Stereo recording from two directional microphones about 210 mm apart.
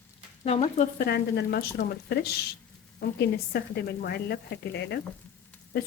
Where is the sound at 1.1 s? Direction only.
50° left (ahead or behind).